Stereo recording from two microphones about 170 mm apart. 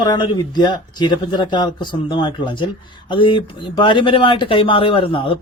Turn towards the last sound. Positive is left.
turn(degrees=30)  # may be behind; listen again after turning